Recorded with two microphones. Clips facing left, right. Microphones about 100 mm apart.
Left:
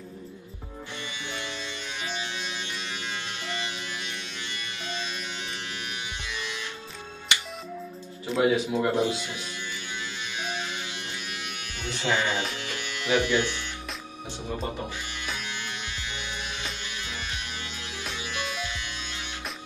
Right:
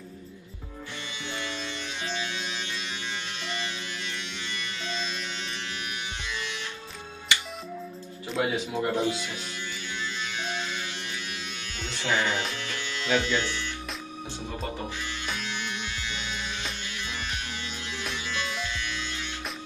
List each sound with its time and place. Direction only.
1.3 s music: 20° left (ahead or behind)
8.4 s speech: 25° left (ahead or behind)
10.2 s music: 15° left (ahead or behind)
11.8 s speech: 20° left (ahead or behind)
12.5 s music: 20° left (ahead or behind)
16.1 s music: 20° left (ahead or behind)
18.1 s music: 20° left (ahead or behind)